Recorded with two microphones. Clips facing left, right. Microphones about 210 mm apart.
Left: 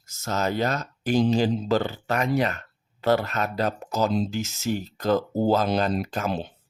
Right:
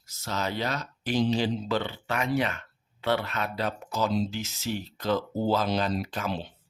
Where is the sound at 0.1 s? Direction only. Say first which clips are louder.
Left 5 dB; 45° left (ahead or behind).